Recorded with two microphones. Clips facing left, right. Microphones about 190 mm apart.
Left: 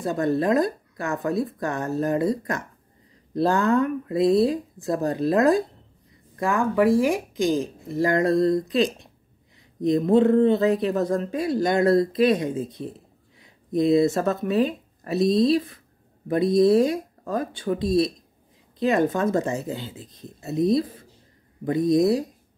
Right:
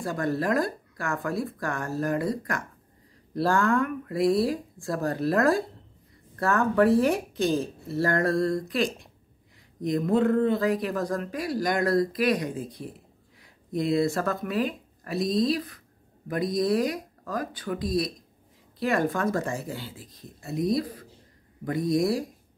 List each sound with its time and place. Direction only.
0.0 s speech: 20° left (ahead or behind)